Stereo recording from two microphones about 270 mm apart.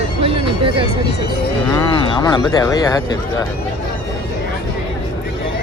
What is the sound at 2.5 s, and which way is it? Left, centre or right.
Speech, centre.